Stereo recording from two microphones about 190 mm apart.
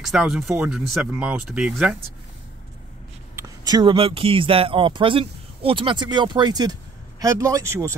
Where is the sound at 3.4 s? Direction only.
20° right (ahead or behind).